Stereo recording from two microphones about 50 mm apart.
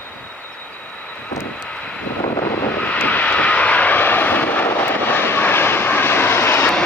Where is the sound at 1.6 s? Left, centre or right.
Left.